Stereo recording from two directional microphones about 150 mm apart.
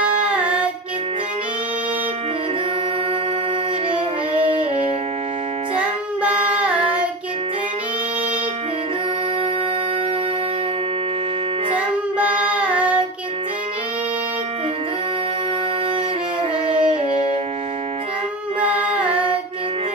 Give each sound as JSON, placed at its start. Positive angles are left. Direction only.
{"t": 0.2, "sound": "music", "side_deg": -5}
{"t": 4.3, "sound": "music", "side_deg": -35}
{"t": 16.6, "sound": "music", "side_deg": -35}